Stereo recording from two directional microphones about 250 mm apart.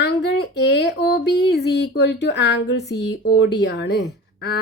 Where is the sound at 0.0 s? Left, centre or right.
Left.